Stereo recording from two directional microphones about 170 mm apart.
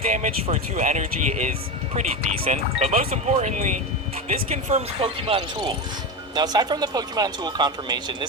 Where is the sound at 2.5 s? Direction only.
40° right (ahead or behind).